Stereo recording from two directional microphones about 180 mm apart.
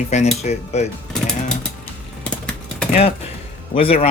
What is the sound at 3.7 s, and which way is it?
Speech, 35° left (ahead or behind).